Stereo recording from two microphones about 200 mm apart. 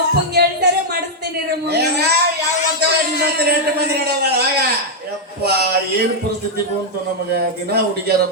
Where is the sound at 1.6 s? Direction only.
55° right (ahead or behind).